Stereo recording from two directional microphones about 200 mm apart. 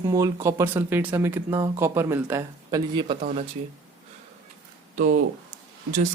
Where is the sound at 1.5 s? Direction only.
20° right (ahead or behind).